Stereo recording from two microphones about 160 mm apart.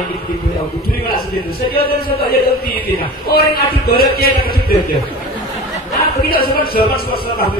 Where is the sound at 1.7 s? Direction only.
70° left (ahead or behind).